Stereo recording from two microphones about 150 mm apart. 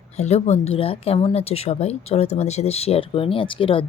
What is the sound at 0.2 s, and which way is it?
Speech, 45° left (ahead or behind).